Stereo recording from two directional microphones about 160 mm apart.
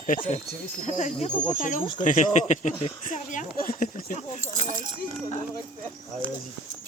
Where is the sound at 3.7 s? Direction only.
65° left (ahead or behind).